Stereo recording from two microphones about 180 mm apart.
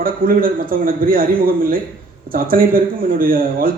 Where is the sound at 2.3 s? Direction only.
50° right (ahead or behind).